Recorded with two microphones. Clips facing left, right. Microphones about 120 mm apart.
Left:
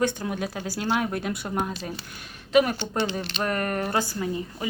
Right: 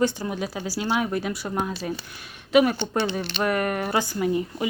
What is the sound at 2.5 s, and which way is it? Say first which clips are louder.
A woman's voice: right 2 dB; 5° right (ahead or behind).